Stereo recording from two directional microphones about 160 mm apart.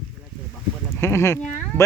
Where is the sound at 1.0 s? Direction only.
15° left (ahead or behind).